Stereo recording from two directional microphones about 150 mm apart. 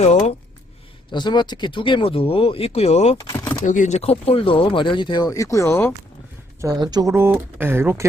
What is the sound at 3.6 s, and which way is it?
Speech, 55° left (ahead or behind).